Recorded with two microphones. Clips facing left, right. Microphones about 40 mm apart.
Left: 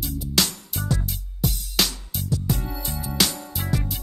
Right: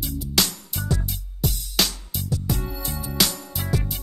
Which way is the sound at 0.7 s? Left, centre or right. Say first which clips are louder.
Even; left.